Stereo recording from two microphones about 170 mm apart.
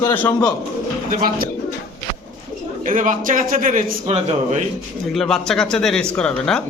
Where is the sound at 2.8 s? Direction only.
50° right (ahead or behind).